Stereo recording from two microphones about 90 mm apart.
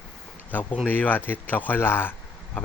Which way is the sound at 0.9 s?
20° left (ahead or behind).